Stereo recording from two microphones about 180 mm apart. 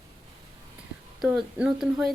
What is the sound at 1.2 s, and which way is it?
Speech, 5° right (ahead or behind).